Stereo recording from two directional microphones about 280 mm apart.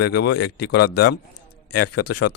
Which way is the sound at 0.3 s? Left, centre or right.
Left.